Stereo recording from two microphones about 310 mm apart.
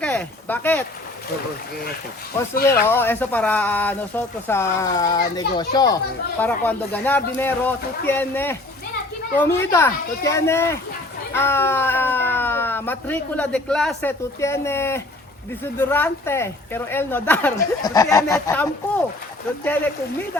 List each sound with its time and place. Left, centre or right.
0.0 s speech: centre
2.9 s speech: centre